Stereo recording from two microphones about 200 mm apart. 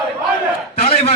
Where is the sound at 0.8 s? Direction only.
30° left (ahead or behind).